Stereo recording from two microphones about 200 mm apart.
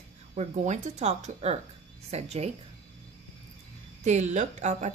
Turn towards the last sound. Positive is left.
turn(degrees=-35)  # may be behind; listen again after turning